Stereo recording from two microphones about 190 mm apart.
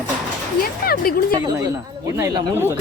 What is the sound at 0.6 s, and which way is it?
Speech, 50° left (ahead or behind).